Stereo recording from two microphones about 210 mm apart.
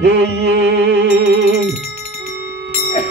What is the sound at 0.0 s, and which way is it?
Music, 55° right (ahead or behind).